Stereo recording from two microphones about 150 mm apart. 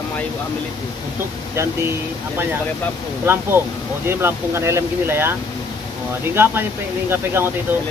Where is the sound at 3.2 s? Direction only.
15° right (ahead or behind).